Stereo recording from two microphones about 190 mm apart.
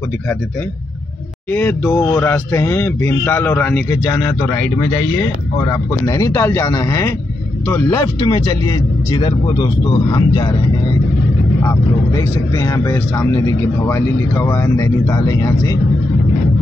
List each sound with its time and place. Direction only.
1.5 s speech: 10° left (ahead or behind)
5.7 s speech: 15° left (ahead or behind)
12.2 s speech: 15° left (ahead or behind)